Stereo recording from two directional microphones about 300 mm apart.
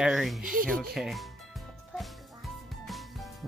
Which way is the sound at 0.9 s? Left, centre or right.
Centre.